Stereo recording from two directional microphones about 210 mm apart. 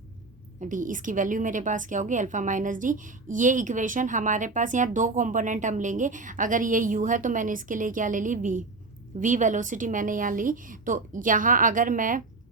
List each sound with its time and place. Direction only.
0.6 s a woman's voice: 40° right (ahead or behind)